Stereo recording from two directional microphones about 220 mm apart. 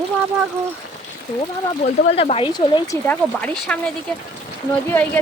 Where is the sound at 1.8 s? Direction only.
30° left (ahead or behind); by 3.5 s 5° left (ahead or behind).